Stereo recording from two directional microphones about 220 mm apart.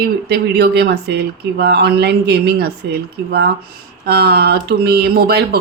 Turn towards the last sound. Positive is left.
turn(degrees=-45)  # may be behind; listen again after turning